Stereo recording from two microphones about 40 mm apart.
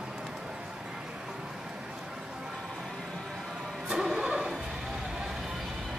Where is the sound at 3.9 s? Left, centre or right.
Centre.